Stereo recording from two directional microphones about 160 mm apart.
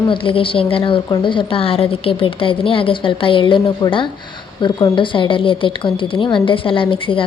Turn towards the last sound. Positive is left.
turn(degrees=35)  # may be behind; listen again after turning